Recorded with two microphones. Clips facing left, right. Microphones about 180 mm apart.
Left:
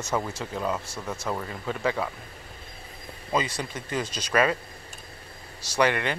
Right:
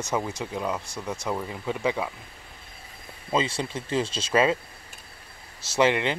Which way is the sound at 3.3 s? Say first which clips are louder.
Right 2 dB; 25° right (ahead or behind).